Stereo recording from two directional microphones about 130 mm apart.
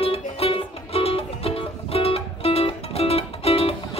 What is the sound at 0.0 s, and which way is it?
Music, 50° left (ahead or behind).